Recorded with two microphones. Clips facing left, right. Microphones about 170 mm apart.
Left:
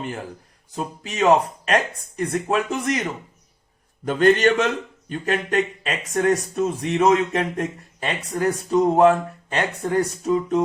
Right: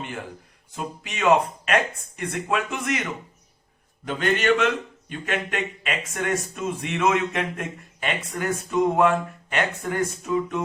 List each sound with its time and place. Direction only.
0.8 s a man's voice: 35° left (ahead or behind)